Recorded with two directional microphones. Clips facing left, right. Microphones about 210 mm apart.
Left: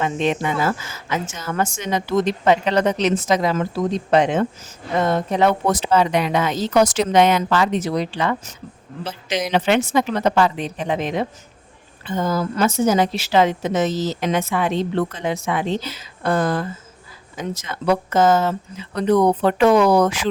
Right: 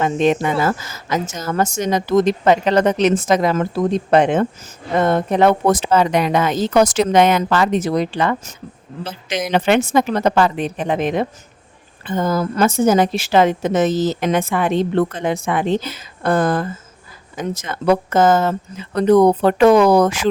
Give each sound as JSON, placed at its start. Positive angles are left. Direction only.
{"t": 0.0, "sound": "a woman's voice", "side_deg": -45}